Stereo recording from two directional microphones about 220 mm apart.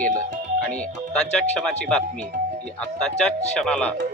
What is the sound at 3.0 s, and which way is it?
Speech, 5° left (ahead or behind).